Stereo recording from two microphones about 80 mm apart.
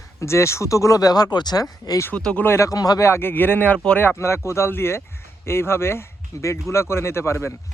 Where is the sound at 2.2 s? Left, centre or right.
Centre.